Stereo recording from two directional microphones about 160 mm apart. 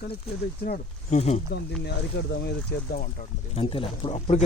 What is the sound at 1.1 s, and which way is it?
Speech, 40° left (ahead or behind).